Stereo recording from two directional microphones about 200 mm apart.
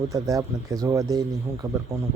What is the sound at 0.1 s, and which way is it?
Speech, 15° right (ahead or behind).